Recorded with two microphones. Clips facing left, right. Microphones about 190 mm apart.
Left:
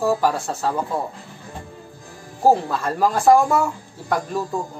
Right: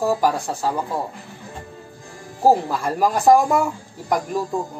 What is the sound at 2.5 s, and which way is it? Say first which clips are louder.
Speech: even; 15° right (ahead or behind).